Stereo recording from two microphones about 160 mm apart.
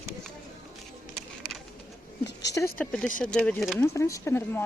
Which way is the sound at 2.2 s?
90° left.